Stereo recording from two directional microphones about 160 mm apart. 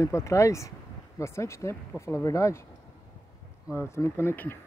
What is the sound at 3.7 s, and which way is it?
Speech, 15° left (ahead or behind).